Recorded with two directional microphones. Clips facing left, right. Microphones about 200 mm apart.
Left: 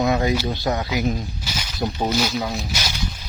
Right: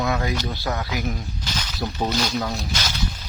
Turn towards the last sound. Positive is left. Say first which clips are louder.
# even
turn(degrees=10)  # may be behind; listen again after turning